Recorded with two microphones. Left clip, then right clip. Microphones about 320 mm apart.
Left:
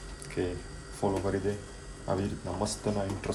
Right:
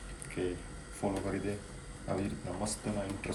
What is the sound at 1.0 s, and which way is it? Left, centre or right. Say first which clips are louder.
Speech: left 5 dB; centre.